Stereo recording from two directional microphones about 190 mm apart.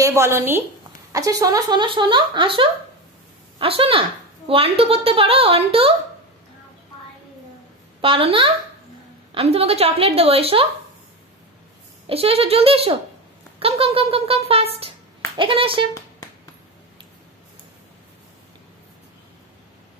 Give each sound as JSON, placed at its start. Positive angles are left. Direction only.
{"t": 0.0, "sound": "a woman's voice", "side_deg": -15}
{"t": 8.0, "sound": "a woman's voice", "side_deg": -30}
{"t": 12.1, "sound": "a woman's voice", "side_deg": -30}